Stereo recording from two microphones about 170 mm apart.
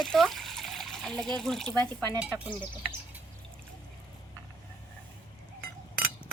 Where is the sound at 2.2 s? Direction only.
10° right (ahead or behind).